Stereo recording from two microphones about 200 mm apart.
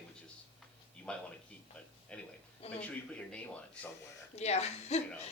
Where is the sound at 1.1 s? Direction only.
5° left (ahead or behind).